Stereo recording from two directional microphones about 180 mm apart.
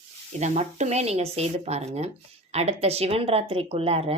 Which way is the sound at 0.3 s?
40° right (ahead or behind).